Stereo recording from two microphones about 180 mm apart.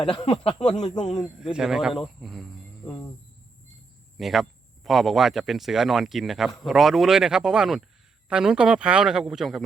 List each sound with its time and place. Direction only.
0.1 s speech: 30° left (ahead or behind)
1.2 s speech: 5° right (ahead or behind)
2.8 s cricket: 5° left (ahead or behind)
4.2 s speech: centre (ahead or behind)